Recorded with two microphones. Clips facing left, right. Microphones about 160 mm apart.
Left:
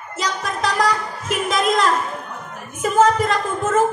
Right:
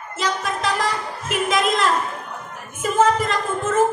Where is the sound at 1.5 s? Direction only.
40° left (ahead or behind).